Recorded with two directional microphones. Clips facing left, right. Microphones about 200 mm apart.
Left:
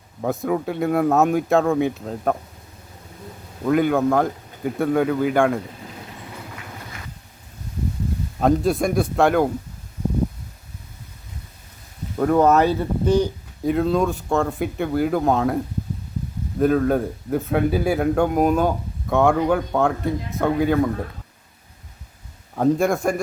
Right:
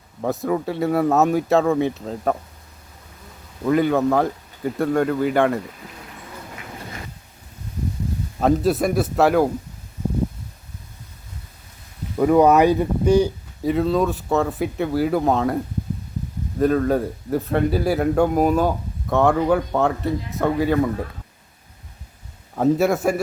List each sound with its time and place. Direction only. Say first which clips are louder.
0.2 s speech: even; centre (ahead or behind)
3.7 s speech: even; centre (ahead or behind)
8.4 s speech: even; centre (ahead or behind)
12.1 s speech: right 2 dB; 5° right (ahead or behind)
13.7 s speech: even; centre (ahead or behind)
22.5 s speech: right 1 dB; 5° right (ahead or behind)